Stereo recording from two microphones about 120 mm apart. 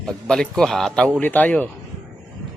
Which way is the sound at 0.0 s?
5° left (ahead or behind).